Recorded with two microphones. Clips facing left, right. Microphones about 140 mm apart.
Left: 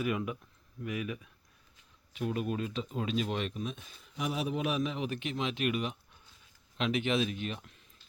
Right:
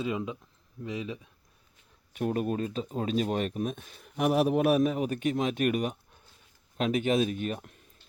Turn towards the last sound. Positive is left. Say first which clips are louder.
# right 5 dB
turn(degrees=-50)  # may be behind; listen again after turning